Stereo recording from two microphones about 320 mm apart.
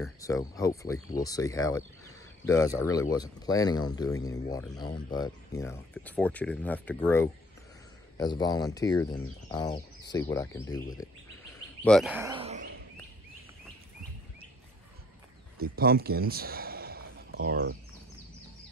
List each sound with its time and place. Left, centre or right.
0.0 s speech: centre
11.8 s speech: centre; by 12.8 s right
15.7 s a man's voice: right